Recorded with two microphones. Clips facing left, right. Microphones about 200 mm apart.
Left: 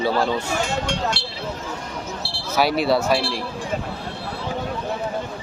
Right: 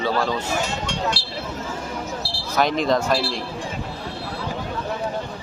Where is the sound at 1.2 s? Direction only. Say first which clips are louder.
Left 4 dB; 25° left (ahead or behind).